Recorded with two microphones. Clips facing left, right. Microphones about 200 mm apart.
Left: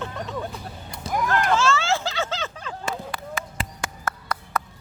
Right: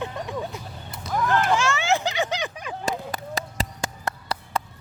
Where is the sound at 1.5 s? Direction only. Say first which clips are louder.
Left 1 dB; 15° right (ahead or behind).